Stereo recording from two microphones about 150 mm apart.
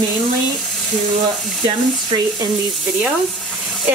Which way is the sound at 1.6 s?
35° right (ahead or behind).